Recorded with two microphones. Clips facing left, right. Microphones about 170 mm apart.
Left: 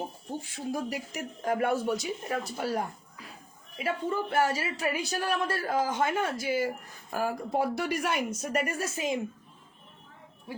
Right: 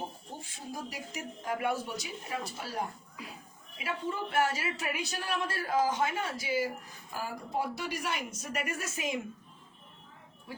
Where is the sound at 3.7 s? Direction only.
45° left (ahead or behind).